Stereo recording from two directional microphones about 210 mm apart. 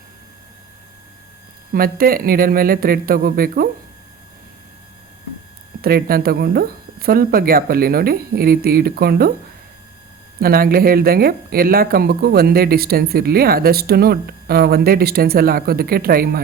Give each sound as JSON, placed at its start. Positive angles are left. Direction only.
{"t": 1.7, "sound": "speech", "side_deg": -45}
{"t": 5.8, "sound": "speech", "side_deg": -45}
{"t": 10.4, "sound": "speech", "side_deg": -45}